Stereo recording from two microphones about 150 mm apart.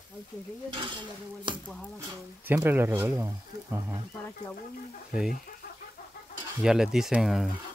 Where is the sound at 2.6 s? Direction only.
15° right (ahead or behind).